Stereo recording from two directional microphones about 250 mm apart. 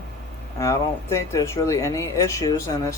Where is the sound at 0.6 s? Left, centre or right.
Centre.